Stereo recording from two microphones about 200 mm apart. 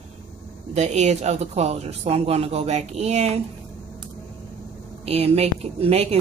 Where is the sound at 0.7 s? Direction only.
35° right (ahead or behind).